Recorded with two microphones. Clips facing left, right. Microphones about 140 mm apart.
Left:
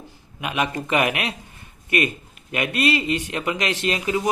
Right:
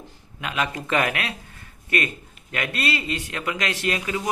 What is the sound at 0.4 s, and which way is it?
A man's voice, 20° left (ahead or behind).